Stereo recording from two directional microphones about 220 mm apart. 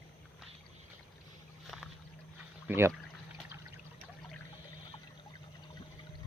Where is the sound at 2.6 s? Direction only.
10° right (ahead or behind).